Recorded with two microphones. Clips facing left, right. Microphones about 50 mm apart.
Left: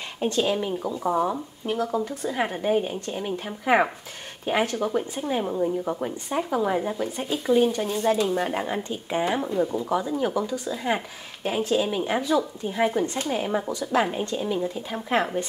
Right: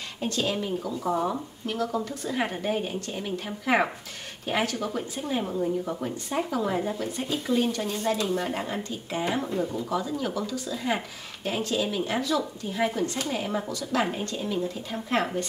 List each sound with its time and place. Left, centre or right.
0.2 s speech: centre